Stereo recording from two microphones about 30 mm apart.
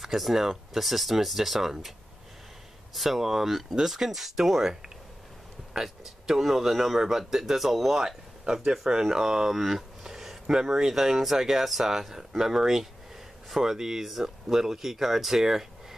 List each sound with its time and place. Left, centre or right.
0.0 s speech: centre
2.9 s speech: centre
5.8 s speech: centre
8.8 s speech: centre
9.5 s a sound: centre
10.4 s speech: centre